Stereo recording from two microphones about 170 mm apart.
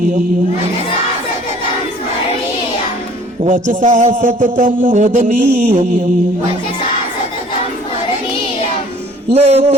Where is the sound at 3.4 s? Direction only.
45° right (ahead or behind).